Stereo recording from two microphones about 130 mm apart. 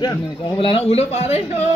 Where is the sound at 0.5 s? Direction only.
45° left (ahead or behind).